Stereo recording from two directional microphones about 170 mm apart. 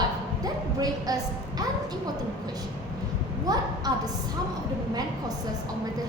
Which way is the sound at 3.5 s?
25° right (ahead or behind).